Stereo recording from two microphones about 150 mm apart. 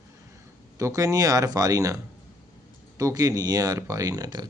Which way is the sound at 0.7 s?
20° right (ahead or behind).